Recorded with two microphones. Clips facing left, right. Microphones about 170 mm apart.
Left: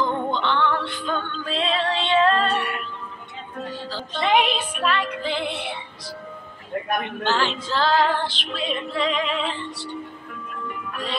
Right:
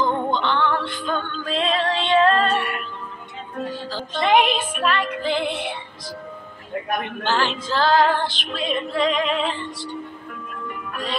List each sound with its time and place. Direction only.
0.3 s music: 45° right (ahead or behind)
3.9 s female singing: 45° right (ahead or behind)
7.2 s female singing: 50° right (ahead or behind)
10.9 s music: 45° right (ahead or behind)